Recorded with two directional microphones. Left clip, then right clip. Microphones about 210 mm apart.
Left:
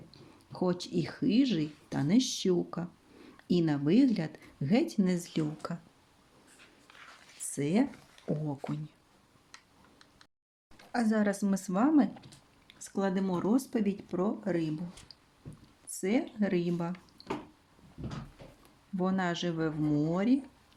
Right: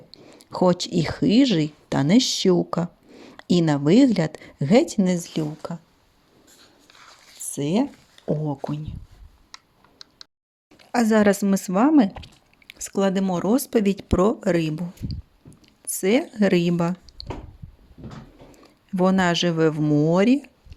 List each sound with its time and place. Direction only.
0.3 s speech: 35° right (ahead or behind); by 5.8 s 15° right (ahead or behind)
7.4 s speech: 20° right (ahead or behind)
10.9 s speech: 40° right (ahead or behind)
15.9 s speech: 45° right (ahead or behind)
18.9 s speech: 45° right (ahead or behind)